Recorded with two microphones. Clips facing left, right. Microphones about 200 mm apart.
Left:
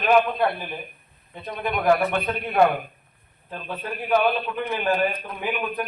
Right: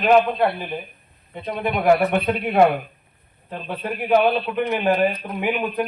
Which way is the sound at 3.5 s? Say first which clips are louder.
Right 4 dB; 20° right (ahead or behind).